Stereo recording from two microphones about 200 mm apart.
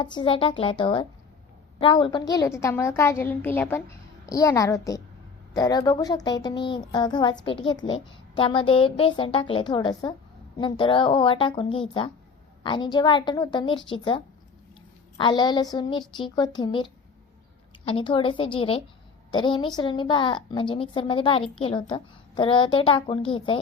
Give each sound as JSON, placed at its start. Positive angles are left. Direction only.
{"t": 0.0, "sound": "a woman's voice", "side_deg": 25}
{"t": 15.2, "sound": "a woman's voice", "side_deg": 25}